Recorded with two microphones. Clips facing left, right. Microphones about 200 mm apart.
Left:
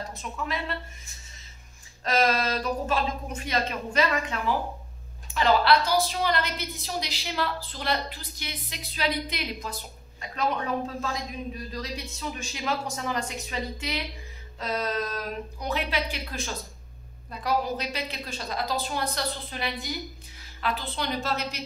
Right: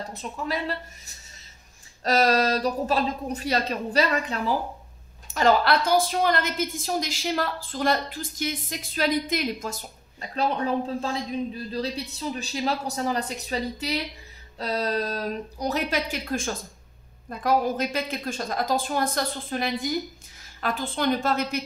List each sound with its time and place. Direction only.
0.1 s a man's voice: 35° right (ahead or behind)
10.3 s a man's voice: 30° right (ahead or behind); by 21.6 s 55° right (ahead or behind)